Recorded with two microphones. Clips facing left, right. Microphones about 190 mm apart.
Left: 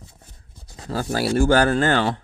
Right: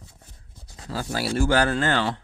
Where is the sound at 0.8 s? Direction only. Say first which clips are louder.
Left 5 dB; 50° left (ahead or behind).